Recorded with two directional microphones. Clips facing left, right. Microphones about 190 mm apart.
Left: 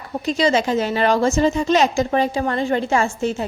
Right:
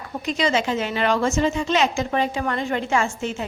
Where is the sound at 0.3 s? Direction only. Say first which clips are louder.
Left 4 dB; 35° left (ahead or behind).